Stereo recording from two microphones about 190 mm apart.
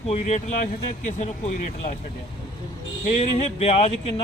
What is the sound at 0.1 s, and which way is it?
Speech, 35° left (ahead or behind).